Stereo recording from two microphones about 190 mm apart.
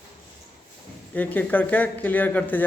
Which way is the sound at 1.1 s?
10° left (ahead or behind).